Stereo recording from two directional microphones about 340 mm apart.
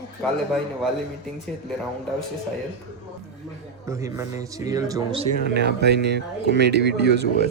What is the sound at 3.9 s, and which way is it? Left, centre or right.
A man's voice, centre.